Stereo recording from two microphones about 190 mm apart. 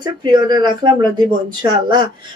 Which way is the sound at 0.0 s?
25° right (ahead or behind).